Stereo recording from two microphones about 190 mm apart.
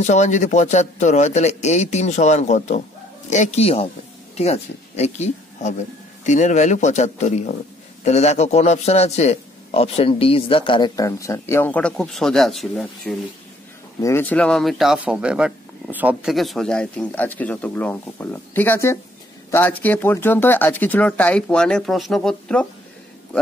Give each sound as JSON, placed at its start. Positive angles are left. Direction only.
{"t": 0.0, "sound": "a man's voice", "side_deg": 40}